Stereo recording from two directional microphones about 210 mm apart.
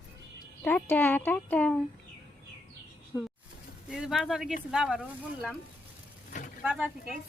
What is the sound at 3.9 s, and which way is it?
Speech, centre (ahead or behind).